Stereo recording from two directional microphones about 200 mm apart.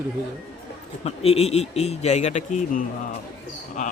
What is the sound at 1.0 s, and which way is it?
Speech, 30° left (ahead or behind).